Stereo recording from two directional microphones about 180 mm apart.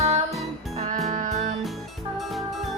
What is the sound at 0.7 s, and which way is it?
Music, 35° right (ahead or behind).